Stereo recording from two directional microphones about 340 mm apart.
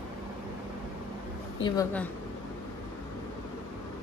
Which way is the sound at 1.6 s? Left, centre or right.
Centre.